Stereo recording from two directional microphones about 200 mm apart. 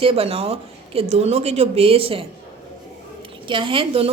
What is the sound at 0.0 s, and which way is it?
A woman's voice, 30° right (ahead or behind).